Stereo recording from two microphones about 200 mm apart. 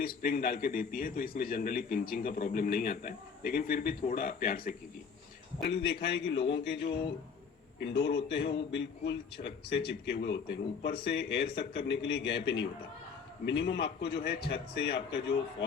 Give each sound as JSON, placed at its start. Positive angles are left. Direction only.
{"t": 0.0, "sound": "a man's voice", "side_deg": 45}
{"t": 5.7, "sound": "a man's voice", "side_deg": 55}